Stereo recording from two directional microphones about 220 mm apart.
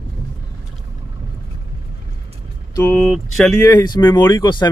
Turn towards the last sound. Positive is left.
turn(degrees=20)  # may be behind; listen again after turning